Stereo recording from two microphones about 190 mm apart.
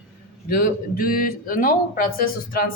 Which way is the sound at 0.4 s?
50° left (ahead or behind).